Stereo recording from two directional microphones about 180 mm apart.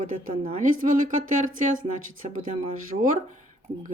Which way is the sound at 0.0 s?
45° right (ahead or behind).